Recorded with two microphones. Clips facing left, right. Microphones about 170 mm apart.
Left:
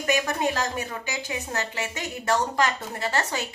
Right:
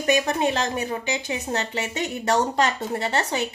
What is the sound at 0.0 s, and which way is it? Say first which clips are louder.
A woman's voice: right 3 dB; 25° right (ahead or behind).